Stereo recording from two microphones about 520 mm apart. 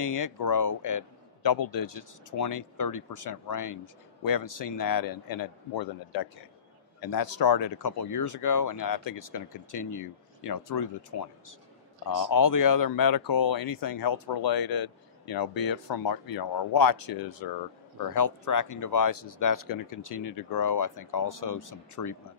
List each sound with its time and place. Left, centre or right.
0.0 s a man's voice: left